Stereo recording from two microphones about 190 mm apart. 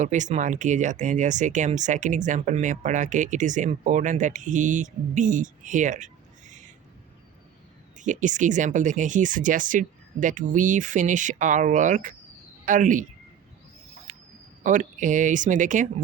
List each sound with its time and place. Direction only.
0.0 s speech: 40° right (ahead or behind)
7.9 s speech: 40° right (ahead or behind)
14.1 s a sound: 40° right (ahead or behind)
14.6 s speech: 40° right (ahead or behind)